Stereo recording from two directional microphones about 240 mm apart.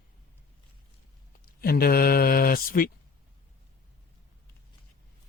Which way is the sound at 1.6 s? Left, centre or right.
Left.